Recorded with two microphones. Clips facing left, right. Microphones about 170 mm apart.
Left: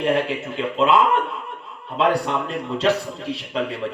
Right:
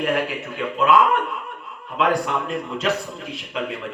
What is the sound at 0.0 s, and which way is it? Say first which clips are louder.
A man's voice: left 2 dB; 25° left (ahead or behind).